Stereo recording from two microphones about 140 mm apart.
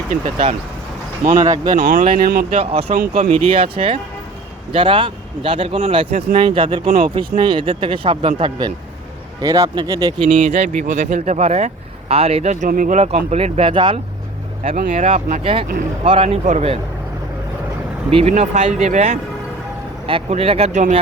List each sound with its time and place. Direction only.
1.4 s speech: 25° right (ahead or behind)
1.7 s speech: 65° right (ahead or behind); by 2.5 s 85° right
2.5 s speech: 45° right (ahead or behind); by 10.2 s 25° right (ahead or behind)
10.2 s speech: 50° right (ahead or behind)
14.6 s speech: 65° right (ahead or behind); by 15.6 s 40° right (ahead or behind)
15.6 s speech: 75° right (ahead or behind)
16.0 s speech: 40° right (ahead or behind)
18.1 s speech: 45° right (ahead or behind)
20.1 s speech: 40° right (ahead or behind)